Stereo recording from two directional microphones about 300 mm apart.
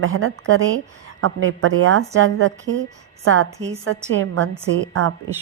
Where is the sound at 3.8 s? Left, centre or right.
Right.